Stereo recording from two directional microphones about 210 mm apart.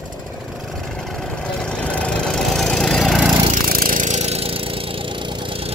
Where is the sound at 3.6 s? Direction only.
40° right (ahead or behind).